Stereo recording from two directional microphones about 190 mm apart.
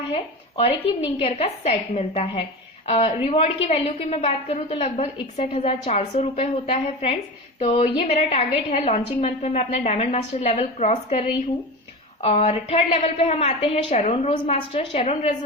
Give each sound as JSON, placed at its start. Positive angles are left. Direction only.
{"t": 0.1, "sound": "a woman's voice", "side_deg": 30}